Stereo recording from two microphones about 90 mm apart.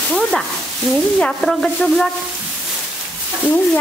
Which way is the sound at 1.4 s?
5° left (ahead or behind).